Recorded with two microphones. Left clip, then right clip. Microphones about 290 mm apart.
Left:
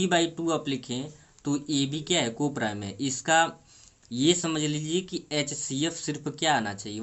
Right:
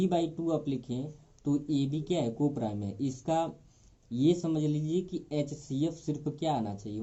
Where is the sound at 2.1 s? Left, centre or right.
Left.